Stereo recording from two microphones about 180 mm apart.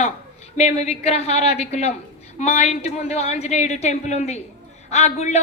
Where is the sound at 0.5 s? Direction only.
35° left (ahead or behind).